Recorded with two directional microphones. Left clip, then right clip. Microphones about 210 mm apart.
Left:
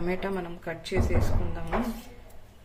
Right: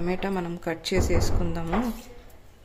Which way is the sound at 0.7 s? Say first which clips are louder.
Right 4 dB; 45° right (ahead or behind).